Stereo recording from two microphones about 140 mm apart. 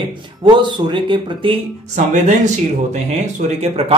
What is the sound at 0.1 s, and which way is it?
Speech, 35° right (ahead or behind).